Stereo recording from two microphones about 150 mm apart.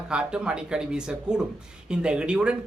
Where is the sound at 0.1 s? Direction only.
5° right (ahead or behind).